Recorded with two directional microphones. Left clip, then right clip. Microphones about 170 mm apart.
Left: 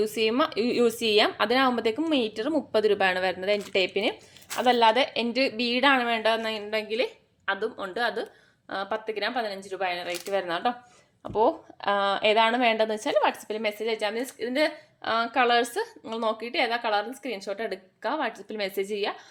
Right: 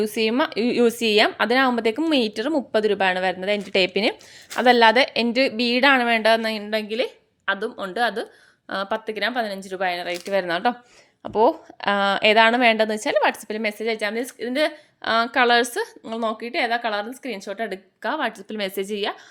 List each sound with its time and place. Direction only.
0.0 s a woman's voice: 35° right (ahead or behind)
11.2 s a woman's voice: 40° right (ahead or behind)